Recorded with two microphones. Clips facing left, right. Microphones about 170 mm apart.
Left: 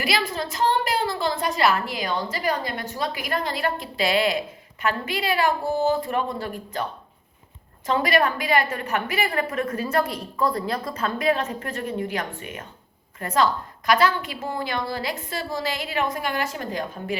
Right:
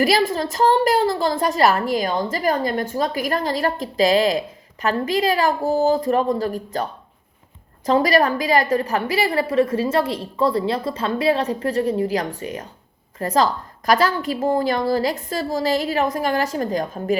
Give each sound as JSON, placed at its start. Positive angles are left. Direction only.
{"t": 0.0, "sound": "a woman's voice", "side_deg": -45}
{"t": 7.9, "sound": "a woman's voice", "side_deg": -40}